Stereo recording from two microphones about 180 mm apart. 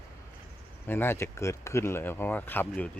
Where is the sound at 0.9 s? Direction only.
10° left (ahead or behind).